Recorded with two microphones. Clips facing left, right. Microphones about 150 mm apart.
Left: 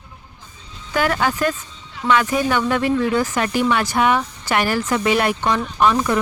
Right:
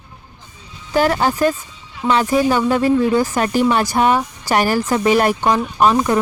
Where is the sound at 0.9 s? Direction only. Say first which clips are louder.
Right 4 dB; 35° right (ahead or behind).